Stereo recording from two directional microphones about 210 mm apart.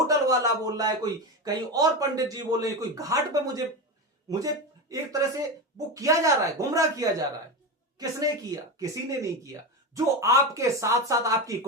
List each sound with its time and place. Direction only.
0.1 s a man's voice: 15° right (ahead or behind)